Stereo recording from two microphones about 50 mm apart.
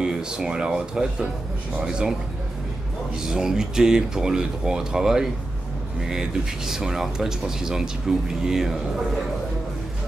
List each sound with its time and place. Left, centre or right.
0.0 s speech: centre
3.3 s speech: centre